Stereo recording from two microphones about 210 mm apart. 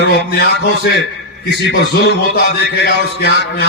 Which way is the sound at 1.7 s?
50° left (ahead or behind).